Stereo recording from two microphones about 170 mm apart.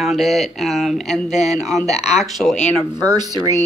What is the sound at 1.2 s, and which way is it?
Speech, 40° left (ahead or behind).